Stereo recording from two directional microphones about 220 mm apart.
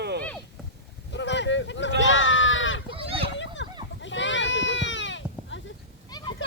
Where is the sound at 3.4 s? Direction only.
55° left (ahead or behind).